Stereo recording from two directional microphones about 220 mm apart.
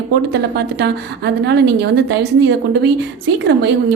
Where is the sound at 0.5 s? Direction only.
50° right (ahead or behind).